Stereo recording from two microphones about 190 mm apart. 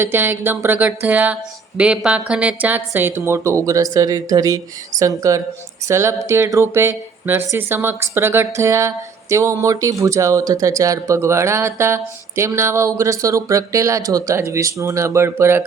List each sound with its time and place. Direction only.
0.0 s speech: 10° right (ahead or behind)